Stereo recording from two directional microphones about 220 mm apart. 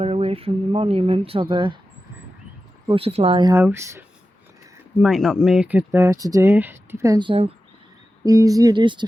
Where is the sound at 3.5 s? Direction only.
10° right (ahead or behind).